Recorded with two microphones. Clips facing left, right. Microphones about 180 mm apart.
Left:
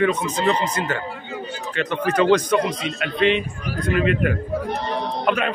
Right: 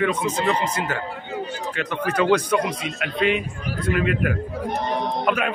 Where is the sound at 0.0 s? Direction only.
5° right (ahead or behind).